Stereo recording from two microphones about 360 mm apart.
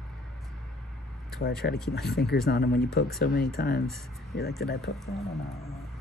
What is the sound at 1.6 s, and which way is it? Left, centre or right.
Speech, left.